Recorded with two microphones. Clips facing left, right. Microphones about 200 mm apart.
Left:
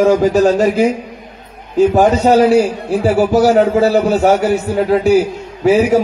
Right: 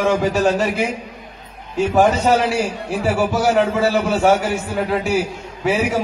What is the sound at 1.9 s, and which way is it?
Speech, 35° left (ahead or behind).